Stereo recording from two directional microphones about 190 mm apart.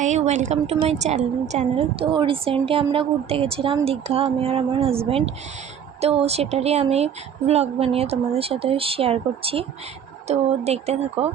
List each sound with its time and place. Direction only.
0.0 s a woman's voice: 40° right (ahead or behind)